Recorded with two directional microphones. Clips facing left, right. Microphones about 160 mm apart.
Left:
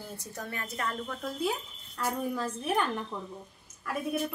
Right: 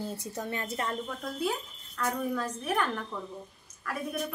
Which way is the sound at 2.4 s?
25° left (ahead or behind).